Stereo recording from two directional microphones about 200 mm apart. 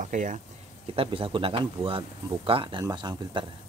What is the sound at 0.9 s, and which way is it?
Speech, 25° right (ahead or behind).